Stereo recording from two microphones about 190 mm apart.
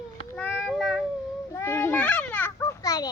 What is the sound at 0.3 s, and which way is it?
Child singing, 5° left (ahead or behind).